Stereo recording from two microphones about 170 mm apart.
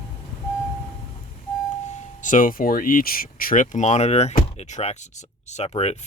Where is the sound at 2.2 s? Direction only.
50° left (ahead or behind).